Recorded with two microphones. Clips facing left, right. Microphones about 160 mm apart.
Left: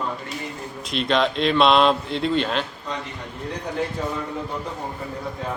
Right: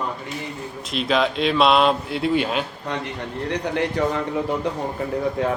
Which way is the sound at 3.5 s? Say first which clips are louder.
Right 3 dB; 75° right (ahead or behind).